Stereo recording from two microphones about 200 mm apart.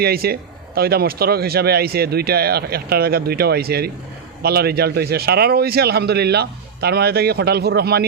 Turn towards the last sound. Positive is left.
turn(degrees=-55)  # may be behind; listen again after turning